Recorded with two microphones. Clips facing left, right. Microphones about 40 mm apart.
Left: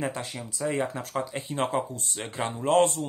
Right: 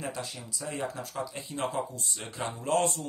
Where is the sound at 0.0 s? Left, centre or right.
Left.